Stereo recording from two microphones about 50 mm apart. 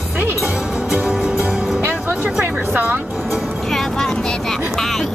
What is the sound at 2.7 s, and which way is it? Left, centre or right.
Music, right.